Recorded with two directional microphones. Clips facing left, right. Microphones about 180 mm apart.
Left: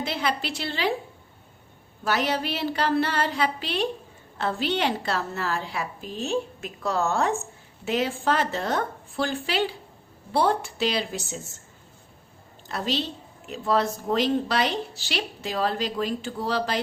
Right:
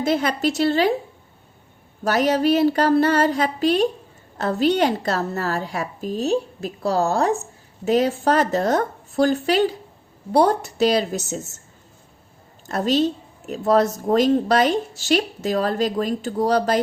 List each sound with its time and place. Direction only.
0.0 s a woman's voice: 45° right (ahead or behind)
2.0 s a woman's voice: 40° right (ahead or behind)
12.6 s a woman's voice: 45° right (ahead or behind)